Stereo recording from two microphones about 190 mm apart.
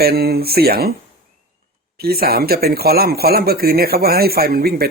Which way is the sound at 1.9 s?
55° right (ahead or behind).